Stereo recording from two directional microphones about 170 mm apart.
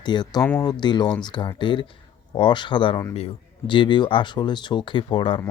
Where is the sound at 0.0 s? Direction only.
25° left (ahead or behind).